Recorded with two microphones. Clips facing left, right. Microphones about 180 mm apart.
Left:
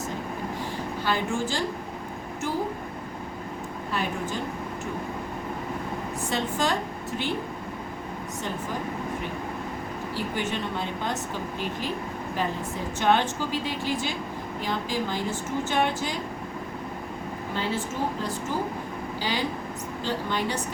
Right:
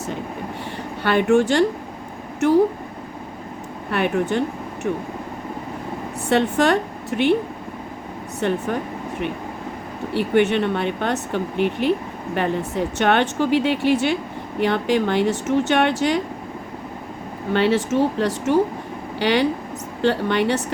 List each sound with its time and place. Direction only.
1.0 s speech: 65° right (ahead or behind)
3.9 s speech: 65° right (ahead or behind)
6.2 s speech: 70° right (ahead or behind)
8.4 s speech: 65° right (ahead or behind)
10.1 s speech: 65° right (ahead or behind)
17.5 s speech: 70° right (ahead or behind)